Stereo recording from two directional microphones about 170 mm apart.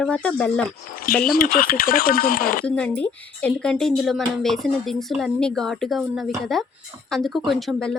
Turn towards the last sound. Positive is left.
turn(degrees=0)  # may be behind; listen again after turning